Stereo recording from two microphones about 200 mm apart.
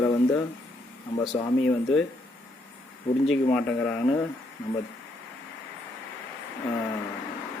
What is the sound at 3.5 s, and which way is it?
Speech, 5° left (ahead or behind).